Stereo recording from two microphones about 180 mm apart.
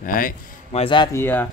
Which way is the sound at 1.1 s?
10° left (ahead or behind).